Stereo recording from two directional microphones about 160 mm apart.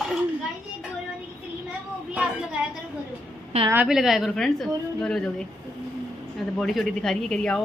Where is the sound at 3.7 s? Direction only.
5° right (ahead or behind).